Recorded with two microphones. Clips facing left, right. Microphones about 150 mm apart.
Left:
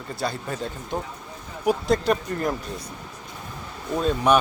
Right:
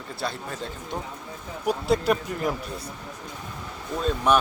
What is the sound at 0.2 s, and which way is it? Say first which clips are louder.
Speech: left 3 dB; centre (ahead or behind).